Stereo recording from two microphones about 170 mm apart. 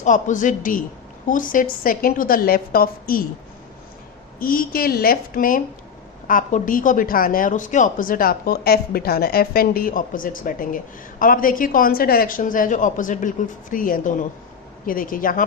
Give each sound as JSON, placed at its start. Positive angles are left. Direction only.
{"t": 0.0, "sound": "a woman's voice", "side_deg": 45}
{"t": 4.4, "sound": "a woman's voice", "side_deg": 55}